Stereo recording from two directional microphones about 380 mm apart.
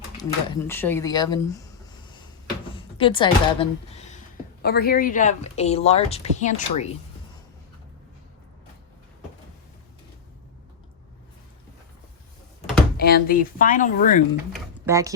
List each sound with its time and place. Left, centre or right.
0.2 s speech: centre
2.7 s speech: centre
4.6 s speech: left
13.0 s speech: left
14.5 s a sound: centre